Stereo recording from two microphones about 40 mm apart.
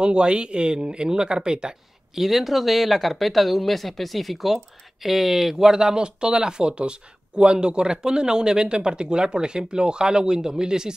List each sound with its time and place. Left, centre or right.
0.0 s speech: right
2.1 s speech: centre